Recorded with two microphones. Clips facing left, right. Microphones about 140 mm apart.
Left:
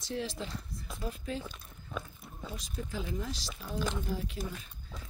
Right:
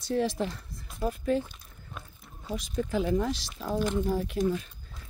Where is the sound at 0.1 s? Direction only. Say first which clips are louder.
Right 9 dB; 55° right (ahead or behind).